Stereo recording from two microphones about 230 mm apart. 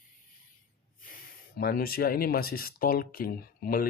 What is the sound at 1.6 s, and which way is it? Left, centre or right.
Speech, left.